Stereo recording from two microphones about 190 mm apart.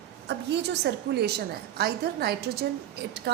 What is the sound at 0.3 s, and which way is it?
A woman's voice, 65° right (ahead or behind).